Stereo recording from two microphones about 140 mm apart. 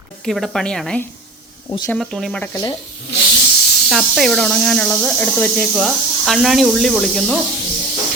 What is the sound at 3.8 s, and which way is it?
Speech, centre (ahead or behind).